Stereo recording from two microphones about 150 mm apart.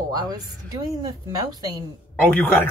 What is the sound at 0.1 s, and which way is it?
A woman's voice, 25° right (ahead or behind).